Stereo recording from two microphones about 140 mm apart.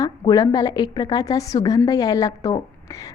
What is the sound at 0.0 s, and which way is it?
A woman's voice, 30° left (ahead or behind).